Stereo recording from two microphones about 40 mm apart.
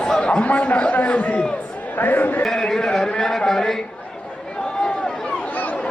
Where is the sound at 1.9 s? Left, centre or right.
Left.